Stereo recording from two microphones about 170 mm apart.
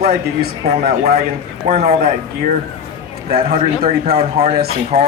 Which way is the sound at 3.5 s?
35° right (ahead or behind).